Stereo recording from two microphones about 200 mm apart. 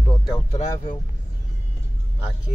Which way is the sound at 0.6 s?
35° left (ahead or behind).